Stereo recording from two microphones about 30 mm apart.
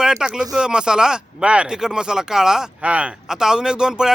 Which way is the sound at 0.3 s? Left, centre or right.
Right.